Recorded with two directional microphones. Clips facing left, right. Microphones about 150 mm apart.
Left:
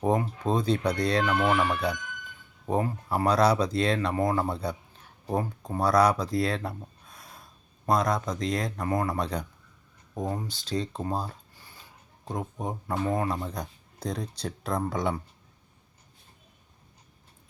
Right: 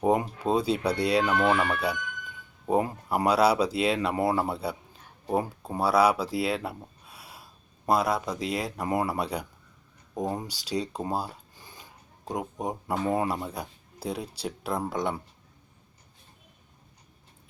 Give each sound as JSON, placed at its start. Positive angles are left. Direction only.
{"t": 0.0, "sound": "speech", "side_deg": -10}
{"t": 2.6, "sound": "speech", "side_deg": -15}